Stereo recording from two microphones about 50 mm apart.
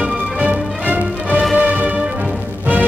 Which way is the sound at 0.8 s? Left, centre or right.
Right.